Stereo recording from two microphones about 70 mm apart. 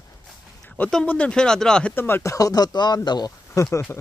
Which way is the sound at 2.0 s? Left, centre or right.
Left.